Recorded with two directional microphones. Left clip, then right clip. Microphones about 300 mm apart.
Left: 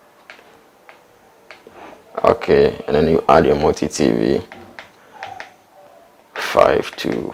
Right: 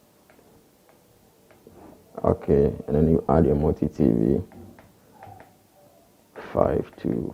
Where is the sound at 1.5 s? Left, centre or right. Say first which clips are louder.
Left 11 dB; centre.